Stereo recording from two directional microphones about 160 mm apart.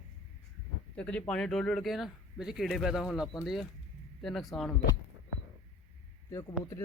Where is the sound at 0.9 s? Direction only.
5° left (ahead or behind).